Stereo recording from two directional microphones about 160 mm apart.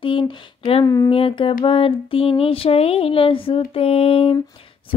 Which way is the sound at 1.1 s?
35° left (ahead or behind).